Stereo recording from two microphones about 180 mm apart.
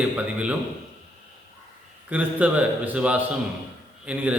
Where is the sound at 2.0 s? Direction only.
10° right (ahead or behind).